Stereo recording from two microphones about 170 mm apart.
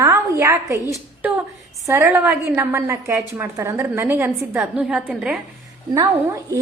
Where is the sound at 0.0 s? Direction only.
20° right (ahead or behind).